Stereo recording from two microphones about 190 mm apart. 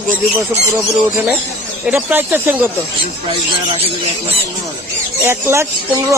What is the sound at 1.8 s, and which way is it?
Speech, 10° right (ahead or behind).